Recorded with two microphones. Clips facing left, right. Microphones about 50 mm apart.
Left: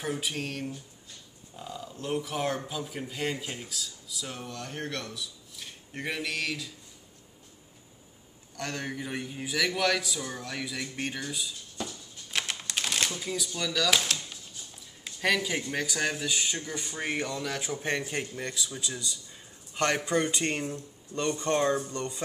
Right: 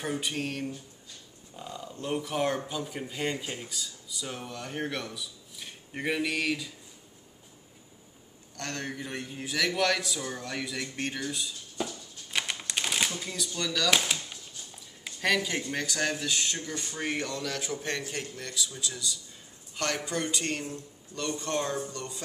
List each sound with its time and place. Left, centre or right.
0.0 s speech: centre
8.5 s a man's voice: centre
13.9 s speech: centre
15.2 s speech: centre; by 22.2 s left